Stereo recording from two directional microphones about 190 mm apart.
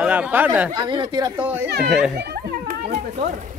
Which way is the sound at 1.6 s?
60° right (ahead or behind).